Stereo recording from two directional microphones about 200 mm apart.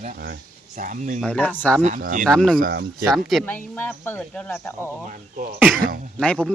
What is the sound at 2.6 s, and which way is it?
Speech, 50° right (ahead or behind).